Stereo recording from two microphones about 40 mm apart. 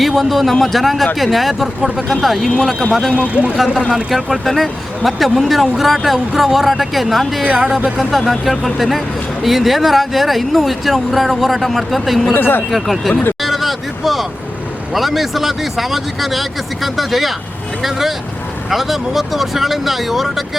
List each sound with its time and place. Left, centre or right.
0.0 s speech: centre
3.3 s speech: right
3.7 s speech: centre
4.4 s speech: centre
12.3 s speech: left
12.7 s speech: centre
13.4 s vehicle: centre
14.9 s speech: centre